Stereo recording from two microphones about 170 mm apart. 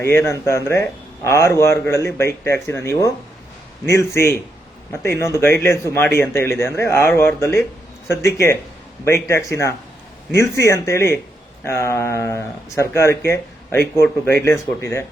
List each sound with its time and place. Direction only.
0.0 s a man's voice: 15° left (ahead or behind)